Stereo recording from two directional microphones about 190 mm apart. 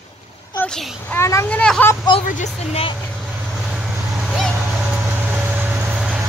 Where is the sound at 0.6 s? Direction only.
5° left (ahead or behind).